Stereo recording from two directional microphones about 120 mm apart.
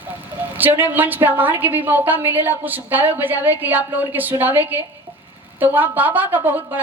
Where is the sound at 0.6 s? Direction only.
15° right (ahead or behind).